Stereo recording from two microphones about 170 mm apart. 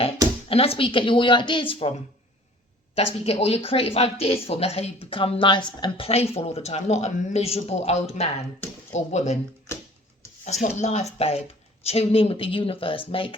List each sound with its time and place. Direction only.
0.4 s speech: 35° left (ahead or behind)
2.9 s speech: 35° left (ahead or behind)
10.4 s speech: 45° left (ahead or behind)